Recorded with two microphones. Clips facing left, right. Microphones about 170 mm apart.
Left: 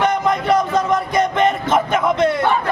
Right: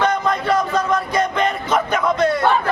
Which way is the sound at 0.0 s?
20° left (ahead or behind).